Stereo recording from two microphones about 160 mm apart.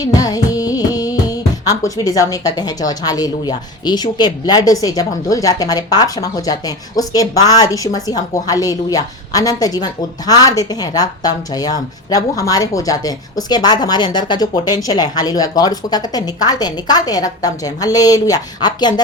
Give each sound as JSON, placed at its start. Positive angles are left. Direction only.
{"t": 0.0, "sound": "music", "side_deg": 25}